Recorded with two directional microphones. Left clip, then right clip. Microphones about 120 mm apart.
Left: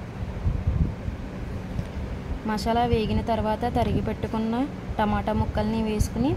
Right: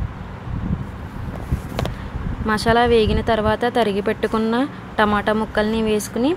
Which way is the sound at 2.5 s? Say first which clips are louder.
Right 8 dB; 30° right (ahead or behind).